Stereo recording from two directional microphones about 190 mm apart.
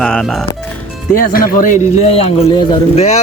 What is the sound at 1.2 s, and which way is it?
A man's voice, 50° left (ahead or behind).